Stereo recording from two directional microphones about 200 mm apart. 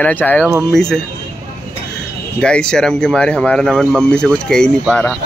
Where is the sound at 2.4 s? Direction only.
5° left (ahead or behind).